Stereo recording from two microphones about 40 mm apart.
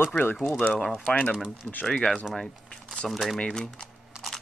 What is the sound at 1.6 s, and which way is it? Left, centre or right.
Speech, left.